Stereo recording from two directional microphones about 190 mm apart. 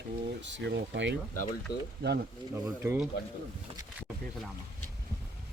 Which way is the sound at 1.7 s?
55° left (ahead or behind).